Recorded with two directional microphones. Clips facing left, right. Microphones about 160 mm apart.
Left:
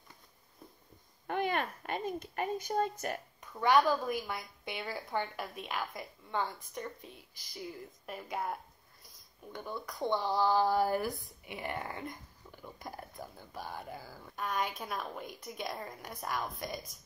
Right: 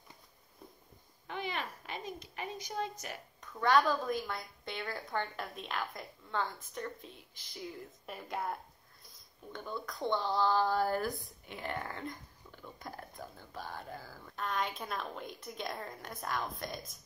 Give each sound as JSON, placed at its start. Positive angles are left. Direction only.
{"t": 1.2, "sound": "a woman's voice", "side_deg": 50}
{"t": 3.5, "sound": "a woman's voice", "side_deg": 15}